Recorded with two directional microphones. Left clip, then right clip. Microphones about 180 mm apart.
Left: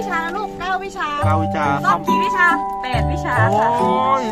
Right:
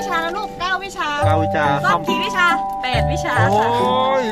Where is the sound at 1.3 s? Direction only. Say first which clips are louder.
Right 2 dB; 15° right (ahead or behind).